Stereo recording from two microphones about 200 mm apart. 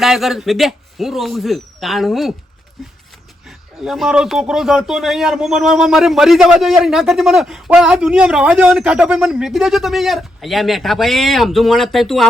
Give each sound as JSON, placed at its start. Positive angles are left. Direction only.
{"t": 0.0, "sound": "a man's voice", "side_deg": 0}
{"t": 3.8, "sound": "a man's voice", "side_deg": 0}